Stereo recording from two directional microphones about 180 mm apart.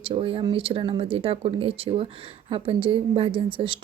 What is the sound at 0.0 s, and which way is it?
A woman's voice, 30° right (ahead or behind).